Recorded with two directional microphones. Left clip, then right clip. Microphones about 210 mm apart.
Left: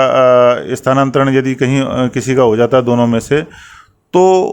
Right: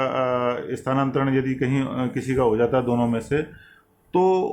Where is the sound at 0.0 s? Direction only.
50° left (ahead or behind).